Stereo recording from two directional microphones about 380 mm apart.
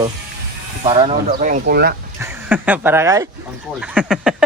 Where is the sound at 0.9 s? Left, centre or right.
Centre.